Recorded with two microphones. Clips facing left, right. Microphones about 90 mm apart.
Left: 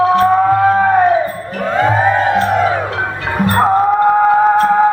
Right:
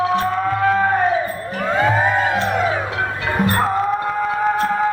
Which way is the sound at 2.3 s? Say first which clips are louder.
Left 5 dB; 45° left (ahead or behind).